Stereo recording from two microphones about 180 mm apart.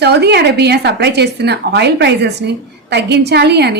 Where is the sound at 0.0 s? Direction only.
65° right (ahead or behind).